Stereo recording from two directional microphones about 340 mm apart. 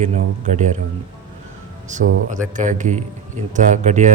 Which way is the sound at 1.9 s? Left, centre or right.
Right.